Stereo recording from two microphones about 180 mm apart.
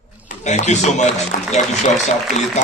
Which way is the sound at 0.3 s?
40° left (ahead or behind).